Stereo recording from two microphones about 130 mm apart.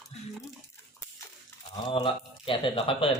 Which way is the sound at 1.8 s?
45° left (ahead or behind).